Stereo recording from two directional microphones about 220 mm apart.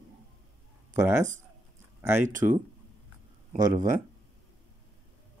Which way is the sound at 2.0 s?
10° right (ahead or behind).